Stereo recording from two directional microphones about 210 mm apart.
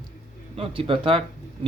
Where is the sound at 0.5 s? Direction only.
25° right (ahead or behind).